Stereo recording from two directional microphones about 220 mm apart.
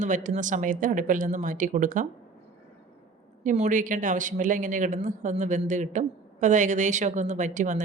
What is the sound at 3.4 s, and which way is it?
A woman's voice, 35° right (ahead or behind).